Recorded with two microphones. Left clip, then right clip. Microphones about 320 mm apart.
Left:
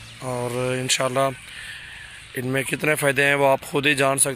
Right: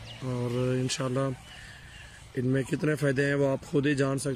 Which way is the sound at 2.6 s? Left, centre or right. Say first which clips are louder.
Left 8 dB; centre.